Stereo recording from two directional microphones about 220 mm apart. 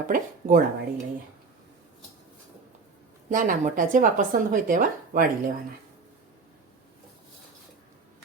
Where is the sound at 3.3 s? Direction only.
35° right (ahead or behind).